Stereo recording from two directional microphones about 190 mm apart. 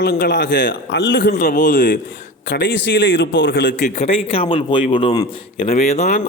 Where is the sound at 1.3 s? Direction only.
40° left (ahead or behind).